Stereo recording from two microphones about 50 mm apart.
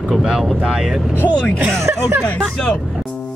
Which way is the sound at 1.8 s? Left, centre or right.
Right.